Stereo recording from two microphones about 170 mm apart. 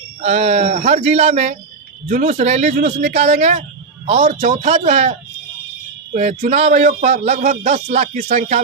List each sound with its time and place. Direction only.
0.2 s speech: 40° right (ahead or behind)
6.1 s speech: 40° right (ahead or behind)